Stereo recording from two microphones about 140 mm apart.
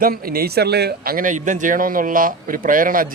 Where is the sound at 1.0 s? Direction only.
80° right.